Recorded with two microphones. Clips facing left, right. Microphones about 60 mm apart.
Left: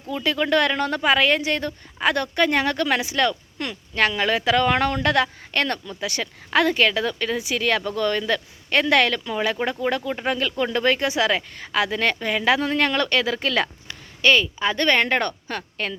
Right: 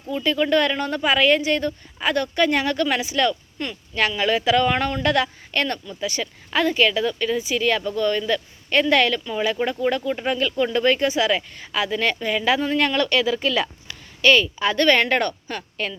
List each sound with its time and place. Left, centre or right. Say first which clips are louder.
0.1 s speech: right 1 dB; left
3.6 s speech: even; left
3.9 s speech: even; left
9.8 s speech: right 2 dB; left
13.8 s speech: right 4 dB; left